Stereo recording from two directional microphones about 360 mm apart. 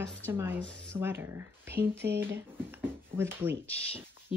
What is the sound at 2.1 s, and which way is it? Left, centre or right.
Speech, centre.